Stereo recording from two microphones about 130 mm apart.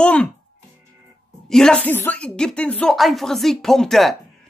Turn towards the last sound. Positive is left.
turn(degrees=0)  # may be behind; listen again after turning